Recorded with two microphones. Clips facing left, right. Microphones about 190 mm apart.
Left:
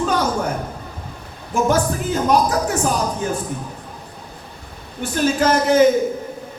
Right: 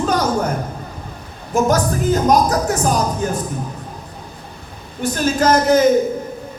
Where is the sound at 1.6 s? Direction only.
40° right (ahead or behind).